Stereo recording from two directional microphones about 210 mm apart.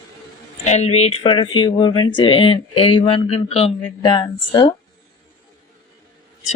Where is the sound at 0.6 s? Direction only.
30° left (ahead or behind).